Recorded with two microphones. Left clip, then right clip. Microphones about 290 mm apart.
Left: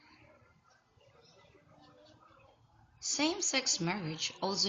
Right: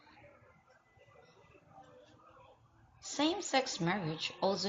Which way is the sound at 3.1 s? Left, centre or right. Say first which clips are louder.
Even; centre.